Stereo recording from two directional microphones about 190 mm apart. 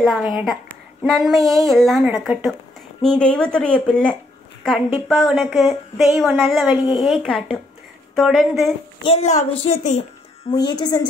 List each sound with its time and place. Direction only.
0.0 s speech: centre (ahead or behind)
9.0 s a woman's voice: 35° left (ahead or behind)
10.5 s a woman's voice: 20° left (ahead or behind)